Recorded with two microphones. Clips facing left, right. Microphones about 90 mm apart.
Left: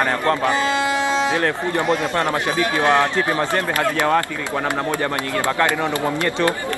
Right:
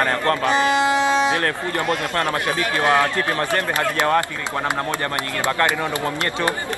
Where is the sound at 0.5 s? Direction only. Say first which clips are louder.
Right 2 dB; 20° right (ahead or behind).